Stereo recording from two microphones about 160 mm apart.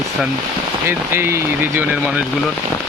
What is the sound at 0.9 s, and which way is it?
Speech, 15° right (ahead or behind).